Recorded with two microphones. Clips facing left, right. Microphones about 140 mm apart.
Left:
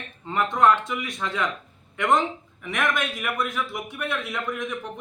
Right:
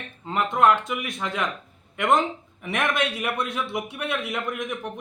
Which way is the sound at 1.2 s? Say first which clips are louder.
Left 1 dB; 15° right (ahead or behind).